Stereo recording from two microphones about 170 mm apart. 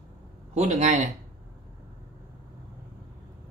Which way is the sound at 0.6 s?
40° right (ahead or behind).